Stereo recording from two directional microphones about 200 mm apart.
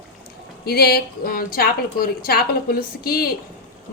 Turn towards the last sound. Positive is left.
turn(degrees=50)  # may be behind; listen again after turning